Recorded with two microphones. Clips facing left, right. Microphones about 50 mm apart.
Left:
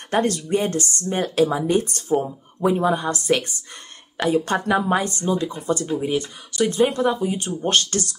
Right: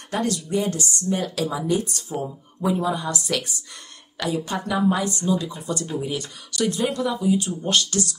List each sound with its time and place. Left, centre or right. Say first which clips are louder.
0.1 s speech: left 4 dB; left
4.5 s a woman's voice: left 2 dB; left
4.9 s speech: left 2 dB; left